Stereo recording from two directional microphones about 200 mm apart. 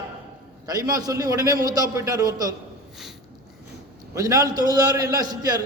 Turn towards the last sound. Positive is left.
turn(degrees=-20)  # may be behind; listen again after turning